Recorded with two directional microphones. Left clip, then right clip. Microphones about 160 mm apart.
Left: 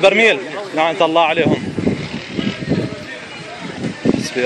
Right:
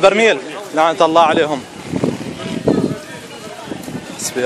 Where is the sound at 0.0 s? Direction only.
30° right (ahead or behind).